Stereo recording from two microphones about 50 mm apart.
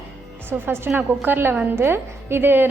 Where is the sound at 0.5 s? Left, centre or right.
Right.